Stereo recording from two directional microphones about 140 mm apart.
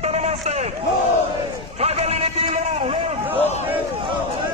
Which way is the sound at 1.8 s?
50° right (ahead or behind).